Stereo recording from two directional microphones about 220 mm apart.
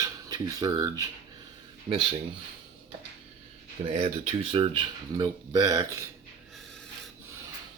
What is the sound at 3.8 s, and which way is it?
Speech, 30° right (ahead or behind).